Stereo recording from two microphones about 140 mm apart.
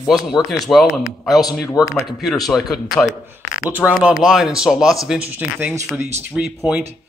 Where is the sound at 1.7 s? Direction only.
25° left (ahead or behind).